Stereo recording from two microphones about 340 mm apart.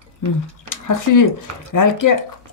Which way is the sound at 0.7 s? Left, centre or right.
Left.